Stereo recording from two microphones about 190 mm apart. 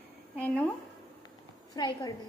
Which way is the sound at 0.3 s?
5° left (ahead or behind).